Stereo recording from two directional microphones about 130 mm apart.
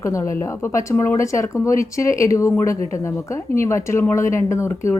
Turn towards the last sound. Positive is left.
turn(degrees=20)  # may be behind; listen again after turning